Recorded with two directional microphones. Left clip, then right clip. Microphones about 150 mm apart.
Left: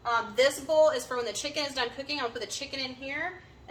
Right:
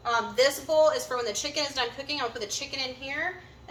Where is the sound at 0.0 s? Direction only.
20° left (ahead or behind).